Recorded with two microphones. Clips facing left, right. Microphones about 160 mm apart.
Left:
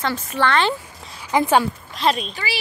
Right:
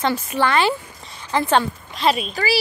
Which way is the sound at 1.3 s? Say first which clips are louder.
Left 1 dB; 10° left (ahead or behind).